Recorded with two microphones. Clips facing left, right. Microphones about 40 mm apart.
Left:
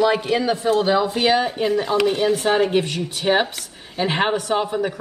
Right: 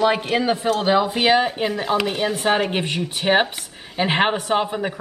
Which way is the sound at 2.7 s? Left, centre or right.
Right.